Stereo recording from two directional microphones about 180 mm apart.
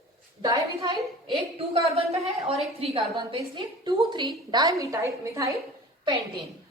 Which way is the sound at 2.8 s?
30° right (ahead or behind).